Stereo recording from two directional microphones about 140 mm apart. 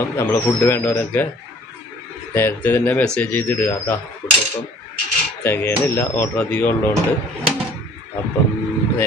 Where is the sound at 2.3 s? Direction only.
15° left (ahead or behind).